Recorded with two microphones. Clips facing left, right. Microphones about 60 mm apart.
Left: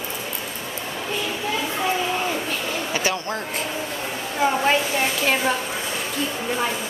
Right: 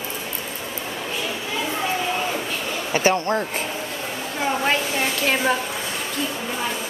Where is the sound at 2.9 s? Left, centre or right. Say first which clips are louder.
Right 8 dB; right.